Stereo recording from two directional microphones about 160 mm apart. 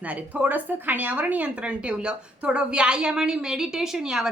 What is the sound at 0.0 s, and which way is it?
A woman's voice, 10° right (ahead or behind).